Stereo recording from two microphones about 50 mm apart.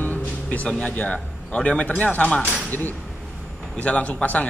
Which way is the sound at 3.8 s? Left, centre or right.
Left.